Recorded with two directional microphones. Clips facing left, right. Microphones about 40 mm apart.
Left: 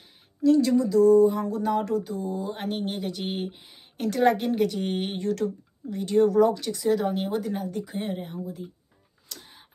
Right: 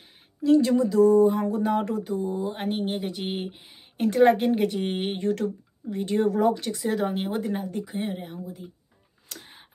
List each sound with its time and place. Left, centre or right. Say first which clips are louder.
0.4 s speech: even; right
7.8 s speech: even; centre
9.3 s a sound: right 1 dB; right